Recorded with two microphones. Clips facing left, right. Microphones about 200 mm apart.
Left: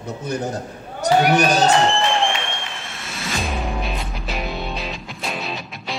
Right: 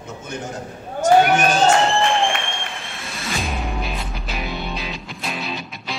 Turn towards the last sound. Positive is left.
turn(degrees=0)  # may be behind; listen again after turning